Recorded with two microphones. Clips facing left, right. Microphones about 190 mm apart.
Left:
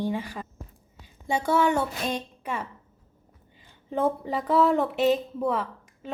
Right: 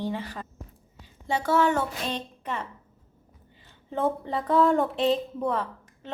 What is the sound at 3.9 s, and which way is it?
A woman's voice, 15° left (ahead or behind).